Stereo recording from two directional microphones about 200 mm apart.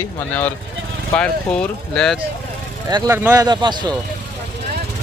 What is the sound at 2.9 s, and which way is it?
Speech, 15° right (ahead or behind).